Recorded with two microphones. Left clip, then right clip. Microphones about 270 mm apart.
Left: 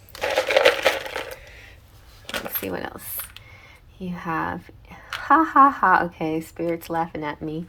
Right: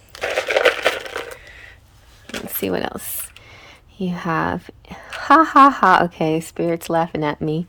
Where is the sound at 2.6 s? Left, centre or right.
Right.